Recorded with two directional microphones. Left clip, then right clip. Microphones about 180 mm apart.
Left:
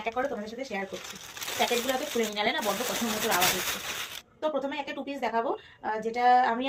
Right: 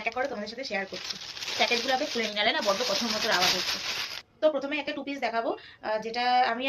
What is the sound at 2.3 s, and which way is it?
Speech, 15° right (ahead or behind).